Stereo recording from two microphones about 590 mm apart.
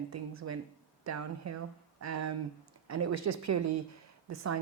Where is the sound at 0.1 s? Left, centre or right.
Right.